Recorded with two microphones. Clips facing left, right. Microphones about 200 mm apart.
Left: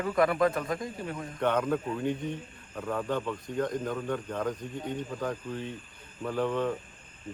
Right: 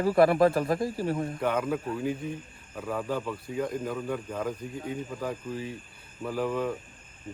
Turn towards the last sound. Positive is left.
turn(degrees=-5)  # may be behind; listen again after turning